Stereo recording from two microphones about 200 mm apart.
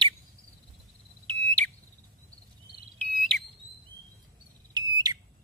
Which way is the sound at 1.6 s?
10° left (ahead or behind).